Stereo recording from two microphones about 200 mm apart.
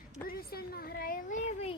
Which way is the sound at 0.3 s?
50° left (ahead or behind).